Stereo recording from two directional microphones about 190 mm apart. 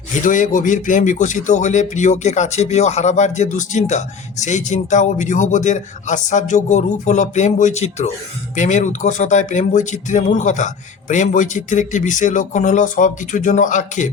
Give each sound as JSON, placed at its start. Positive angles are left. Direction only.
{"t": 0.3, "sound": "speech", "side_deg": 40}